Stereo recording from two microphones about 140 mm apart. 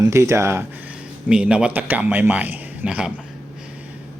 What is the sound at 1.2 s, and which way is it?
A man's voice, 10° right (ahead or behind).